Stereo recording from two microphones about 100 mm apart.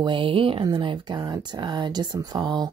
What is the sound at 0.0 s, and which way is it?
Speech, 60° right (ahead or behind).